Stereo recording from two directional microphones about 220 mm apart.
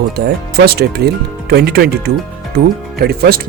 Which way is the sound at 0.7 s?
45° right (ahead or behind).